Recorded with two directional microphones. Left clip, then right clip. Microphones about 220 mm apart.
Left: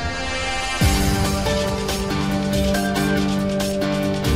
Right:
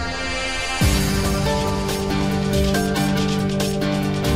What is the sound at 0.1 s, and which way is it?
Music, centre (ahead or behind).